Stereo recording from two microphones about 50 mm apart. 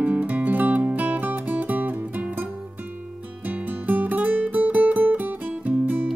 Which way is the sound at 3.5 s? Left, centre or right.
Right.